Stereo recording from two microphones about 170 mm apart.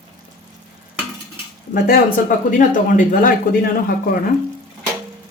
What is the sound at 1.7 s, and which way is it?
Speech, 55° left (ahead or behind).